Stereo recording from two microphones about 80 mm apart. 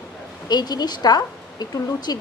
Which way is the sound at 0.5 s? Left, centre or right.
Left.